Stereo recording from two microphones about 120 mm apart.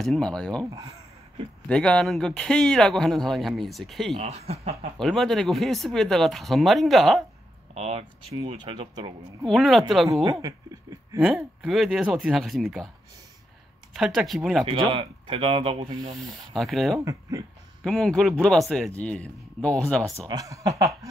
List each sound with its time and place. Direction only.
0.0 s speech: 5° left (ahead or behind)
1.7 s speech: 5° left (ahead or behind)
4.2 s speech: 60° right (ahead or behind)
4.9 s speech: 5° left (ahead or behind)
7.7 s speech: 60° right (ahead or behind); by 9.5 s 40° right (ahead or behind)
9.5 s speech: centre (ahead or behind)
11.1 s speech: 5° right (ahead or behind)
13.9 s speech: 5° right (ahead or behind)
14.7 s speech: 45° right (ahead or behind)
16.2 s speech: centre (ahead or behind)
17.0 s speech: 30° right (ahead or behind)
17.8 s speech: centre (ahead or behind)
20.2 s speech: 30° right (ahead or behind)